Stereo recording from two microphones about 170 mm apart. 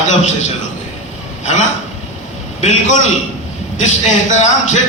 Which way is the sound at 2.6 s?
45° left (ahead or behind).